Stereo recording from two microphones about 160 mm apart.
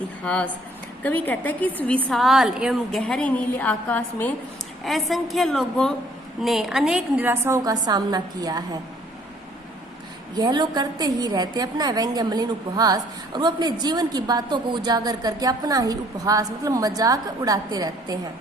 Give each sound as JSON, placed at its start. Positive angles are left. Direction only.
{"t": 0.3, "sound": "a woman's voice", "side_deg": 5}
{"t": 4.8, "sound": "a woman's voice", "side_deg": 0}
{"t": 10.3, "sound": "a woman's voice", "side_deg": -25}